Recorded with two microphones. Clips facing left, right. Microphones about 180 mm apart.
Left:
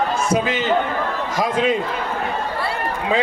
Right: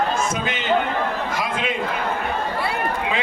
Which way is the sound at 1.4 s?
40° left (ahead or behind).